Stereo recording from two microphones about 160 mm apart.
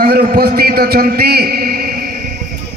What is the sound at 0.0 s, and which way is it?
A man's voice, 65° right (ahead or behind).